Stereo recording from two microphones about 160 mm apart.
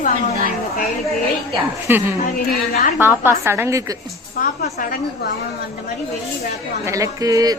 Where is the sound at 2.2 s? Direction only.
60° left (ahead or behind).